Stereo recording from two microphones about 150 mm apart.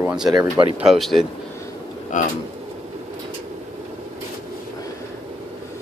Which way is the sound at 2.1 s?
60° left (ahead or behind).